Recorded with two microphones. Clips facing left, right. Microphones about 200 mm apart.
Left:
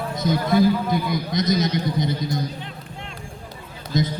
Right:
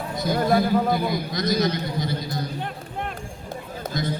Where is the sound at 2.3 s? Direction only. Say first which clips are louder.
Left 1 dB; 55° right (ahead or behind).